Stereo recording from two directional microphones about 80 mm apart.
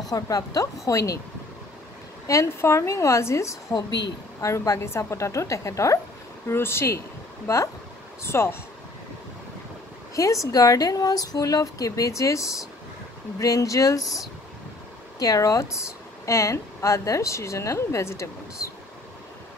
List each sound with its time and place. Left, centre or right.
0.1 s speech: left
0.8 s speech: left
2.4 s speech: left
3.7 s a woman's voice: left
4.5 s speech: left
10.1 s speech: left
15.1 s speech: left